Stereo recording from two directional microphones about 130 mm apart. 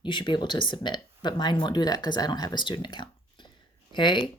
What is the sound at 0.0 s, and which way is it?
Speech, 35° left (ahead or behind).